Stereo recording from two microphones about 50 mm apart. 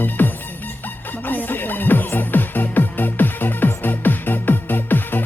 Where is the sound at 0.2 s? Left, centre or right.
Left.